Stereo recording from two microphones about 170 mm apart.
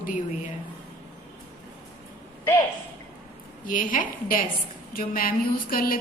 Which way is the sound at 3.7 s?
50° left (ahead or behind).